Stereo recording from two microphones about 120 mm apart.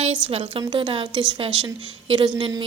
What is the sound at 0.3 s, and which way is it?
A woman's voice, 55° right (ahead or behind).